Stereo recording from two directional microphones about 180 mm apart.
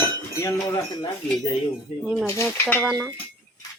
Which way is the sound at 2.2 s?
15° left (ahead or behind).